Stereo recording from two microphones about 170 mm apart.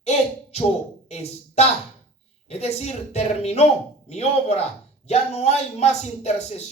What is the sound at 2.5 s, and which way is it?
Speech, 40° left (ahead or behind).